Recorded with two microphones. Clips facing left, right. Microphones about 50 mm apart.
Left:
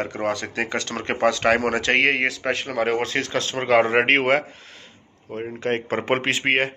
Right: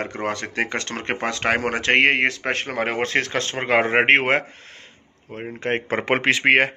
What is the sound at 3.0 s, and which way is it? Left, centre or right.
Speech, right.